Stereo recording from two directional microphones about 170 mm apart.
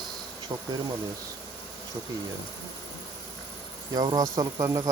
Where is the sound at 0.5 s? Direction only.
20° right (ahead or behind).